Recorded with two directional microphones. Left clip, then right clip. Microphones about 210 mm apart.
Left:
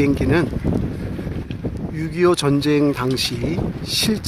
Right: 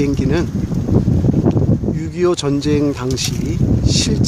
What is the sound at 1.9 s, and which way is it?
Speech, centre (ahead or behind).